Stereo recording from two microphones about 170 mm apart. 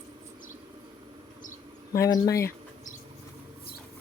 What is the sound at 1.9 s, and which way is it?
Speech, 20° left (ahead or behind).